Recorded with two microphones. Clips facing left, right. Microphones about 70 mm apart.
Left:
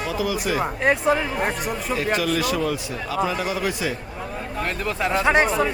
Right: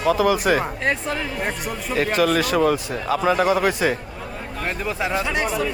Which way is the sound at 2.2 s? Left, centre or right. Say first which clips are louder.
Right 4 dB; right.